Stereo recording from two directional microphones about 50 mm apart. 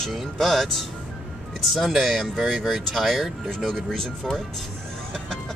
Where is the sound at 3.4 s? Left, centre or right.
Centre.